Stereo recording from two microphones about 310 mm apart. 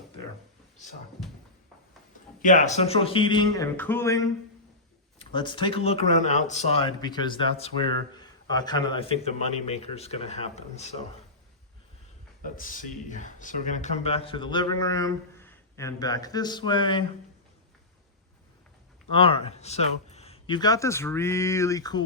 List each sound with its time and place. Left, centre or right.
2.4 s speech: left
12.5 s speech: left
19.1 s speech: centre